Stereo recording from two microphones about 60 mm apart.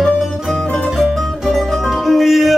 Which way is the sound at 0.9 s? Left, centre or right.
Centre.